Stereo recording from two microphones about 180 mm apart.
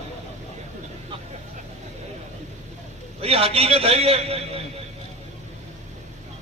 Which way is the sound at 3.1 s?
35° right (ahead or behind).